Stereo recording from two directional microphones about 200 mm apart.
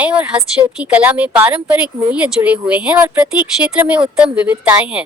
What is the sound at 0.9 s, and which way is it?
A woman's voice, 5° right (ahead or behind).